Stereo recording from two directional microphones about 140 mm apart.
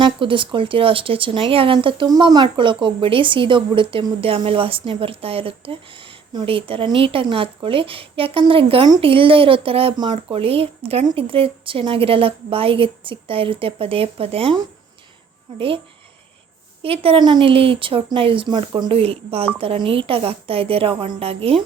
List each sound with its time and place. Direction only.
0.0 s speech: 35° right (ahead or behind)
15.5 s speech: 40° right (ahead or behind)
16.8 s a woman's voice: 40° right (ahead or behind)